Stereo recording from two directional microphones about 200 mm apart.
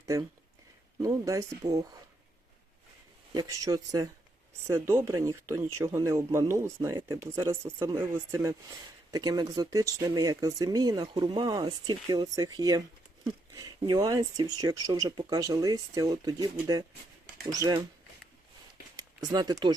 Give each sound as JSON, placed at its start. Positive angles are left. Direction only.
{"t": 0.0, "sound": "speech", "side_deg": -15}
{"t": 3.3, "sound": "speech", "side_deg": -15}
{"t": 18.9, "sound": "speech", "side_deg": -20}